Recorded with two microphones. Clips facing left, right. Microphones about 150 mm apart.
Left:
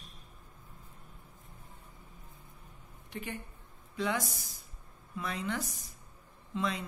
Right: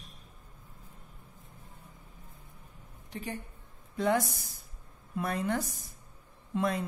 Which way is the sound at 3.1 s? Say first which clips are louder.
Right 2 dB; 35° right (ahead or behind).